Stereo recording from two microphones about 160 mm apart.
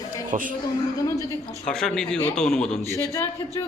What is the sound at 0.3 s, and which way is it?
Speech, 55° right (ahead or behind).